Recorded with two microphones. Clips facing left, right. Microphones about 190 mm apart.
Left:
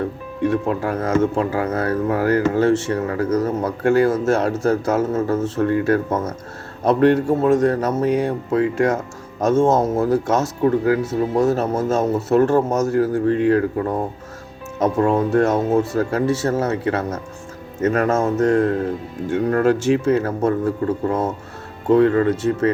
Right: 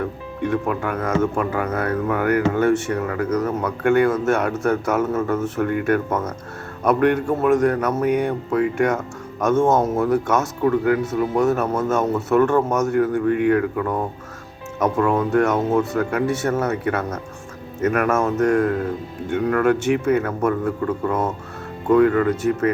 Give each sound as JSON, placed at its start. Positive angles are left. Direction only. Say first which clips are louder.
{"t": 0.4, "sound": "speech", "louder": "left 3 dB", "side_deg": 30}